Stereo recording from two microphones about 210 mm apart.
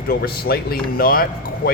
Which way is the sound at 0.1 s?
45° left (ahead or behind).